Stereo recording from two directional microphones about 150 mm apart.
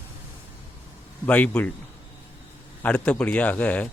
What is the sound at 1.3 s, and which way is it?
Speech, 10° left (ahead or behind).